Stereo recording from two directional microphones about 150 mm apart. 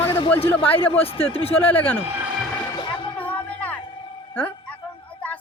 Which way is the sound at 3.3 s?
10° left (ahead or behind).